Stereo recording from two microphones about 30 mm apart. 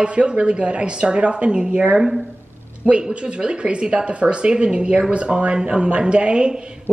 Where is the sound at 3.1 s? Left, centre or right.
Right.